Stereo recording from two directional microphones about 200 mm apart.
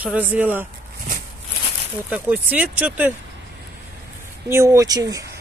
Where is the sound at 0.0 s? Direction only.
10° right (ahead or behind).